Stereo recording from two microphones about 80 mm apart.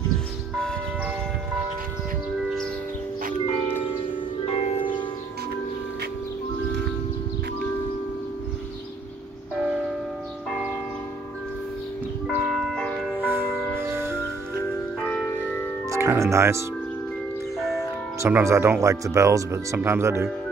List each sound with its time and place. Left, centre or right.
4.1 s music: left
9.6 s church bell: centre
12.4 s music: centre
13.2 s music: right
15.0 s music: left
15.9 s music: right
17.6 s music: centre
18.2 s speech: right